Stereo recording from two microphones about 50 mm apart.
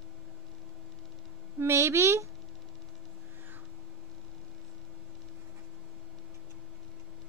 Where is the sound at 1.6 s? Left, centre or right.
Right.